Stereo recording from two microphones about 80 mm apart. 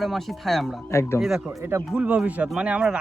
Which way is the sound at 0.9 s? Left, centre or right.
Left.